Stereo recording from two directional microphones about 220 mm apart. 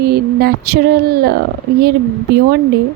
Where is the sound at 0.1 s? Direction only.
45° right (ahead or behind).